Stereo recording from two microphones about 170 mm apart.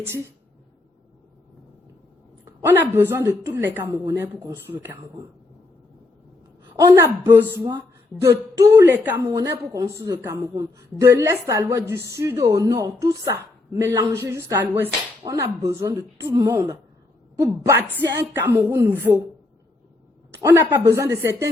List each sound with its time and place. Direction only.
2.6 s a woman's voice: 15° right (ahead or behind)
6.7 s a woman's voice: 20° right (ahead or behind)
20.4 s a woman's voice: 15° right (ahead or behind)